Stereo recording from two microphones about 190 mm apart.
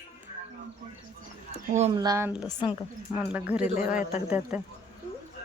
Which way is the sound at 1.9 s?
15° right (ahead or behind).